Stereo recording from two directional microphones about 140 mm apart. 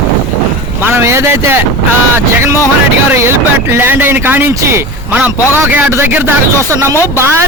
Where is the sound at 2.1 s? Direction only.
20° right (ahead or behind).